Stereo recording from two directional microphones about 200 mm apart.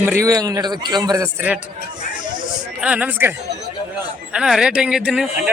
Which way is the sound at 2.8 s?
5° right (ahead or behind).